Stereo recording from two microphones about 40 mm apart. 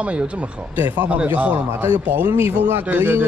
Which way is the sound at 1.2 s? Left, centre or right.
Right.